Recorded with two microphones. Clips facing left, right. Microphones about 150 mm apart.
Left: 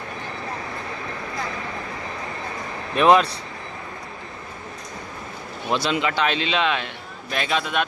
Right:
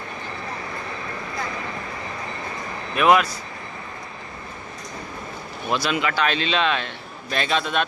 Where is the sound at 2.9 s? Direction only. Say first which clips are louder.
Left 2 dB; 30° left (ahead or behind).